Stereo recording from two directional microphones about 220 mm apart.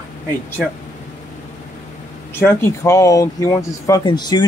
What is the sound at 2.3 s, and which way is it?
Speech, 10° left (ahead or behind).